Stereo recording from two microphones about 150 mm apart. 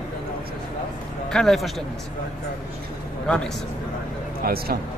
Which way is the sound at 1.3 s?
5° left (ahead or behind).